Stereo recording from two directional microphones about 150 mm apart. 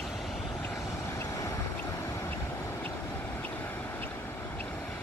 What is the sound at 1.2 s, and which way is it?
Vehicle, 20° left (ahead or behind).